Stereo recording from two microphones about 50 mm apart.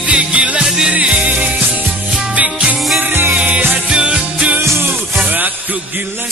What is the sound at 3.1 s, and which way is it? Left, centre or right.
Music, right.